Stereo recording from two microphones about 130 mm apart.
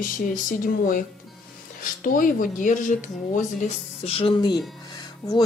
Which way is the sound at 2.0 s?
90° left.